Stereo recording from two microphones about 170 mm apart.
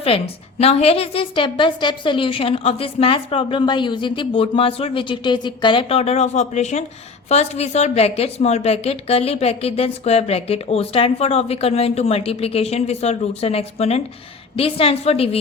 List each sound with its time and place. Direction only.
0.6 s a woman's voice: 35° left (ahead or behind)